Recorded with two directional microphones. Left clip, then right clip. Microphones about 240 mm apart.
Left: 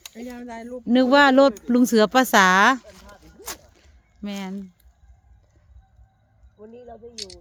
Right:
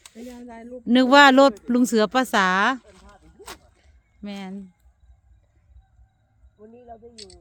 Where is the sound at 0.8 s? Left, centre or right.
Centre.